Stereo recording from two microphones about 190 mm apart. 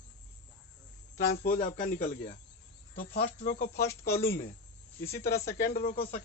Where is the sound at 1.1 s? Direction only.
45° left (ahead or behind).